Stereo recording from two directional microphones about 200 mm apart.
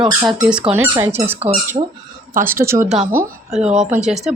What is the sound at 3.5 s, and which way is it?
Speech, 5° right (ahead or behind).